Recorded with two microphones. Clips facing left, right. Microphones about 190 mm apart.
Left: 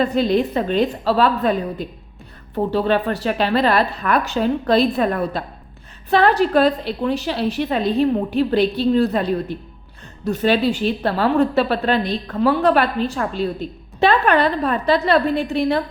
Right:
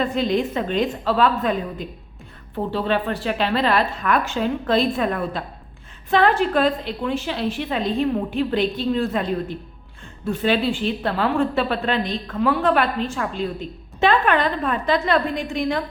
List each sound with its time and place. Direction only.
0.0 s a woman's voice: 40° left (ahead or behind)
2.6 s a woman's voice: 40° left (ahead or behind)